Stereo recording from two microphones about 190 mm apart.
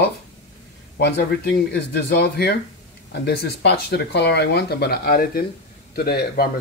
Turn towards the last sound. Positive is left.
turn(degrees=55)  # may be behind; listen again after turning